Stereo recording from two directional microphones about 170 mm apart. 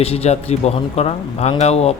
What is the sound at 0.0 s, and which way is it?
Speech, 35° left (ahead or behind).